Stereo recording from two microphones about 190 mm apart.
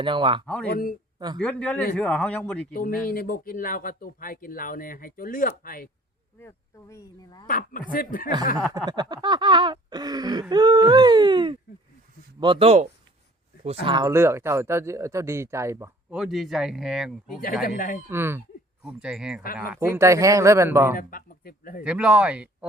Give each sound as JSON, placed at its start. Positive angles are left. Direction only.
{"t": 0.0, "sound": "a sound", "side_deg": -25}
{"t": 0.4, "sound": "speech", "side_deg": 5}
{"t": 0.7, "sound": "speech", "side_deg": 50}
{"t": 1.4, "sound": "speech", "side_deg": 5}
{"t": 2.7, "sound": "speech", "side_deg": 50}
{"t": 6.4, "sound": "speech", "side_deg": 15}
{"t": 7.4, "sound": "speech", "side_deg": 45}
{"t": 8.9, "sound": "a sound", "side_deg": -20}
{"t": 12.4, "sound": "speech", "side_deg": -25}
{"t": 16.1, "sound": "speech", "side_deg": 0}
{"t": 17.7, "sound": "speech", "side_deg": 45}
{"t": 18.1, "sound": "speech", "side_deg": -10}
{"t": 21.0, "sound": "speech", "side_deg": 50}
{"t": 21.8, "sound": "speech", "side_deg": -5}